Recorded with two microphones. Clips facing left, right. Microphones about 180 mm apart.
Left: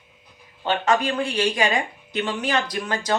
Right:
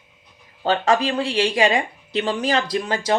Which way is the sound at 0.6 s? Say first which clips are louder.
Right 2 dB; 35° right (ahead or behind).